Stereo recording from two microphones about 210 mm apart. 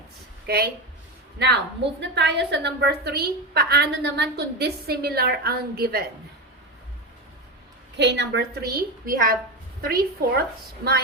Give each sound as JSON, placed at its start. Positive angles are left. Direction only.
{"t": 0.4, "sound": "a woman's voice", "side_deg": -50}
{"t": 7.9, "sound": "a woman's voice", "side_deg": -55}